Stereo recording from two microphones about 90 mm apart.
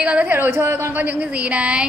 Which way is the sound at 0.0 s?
15° right (ahead or behind).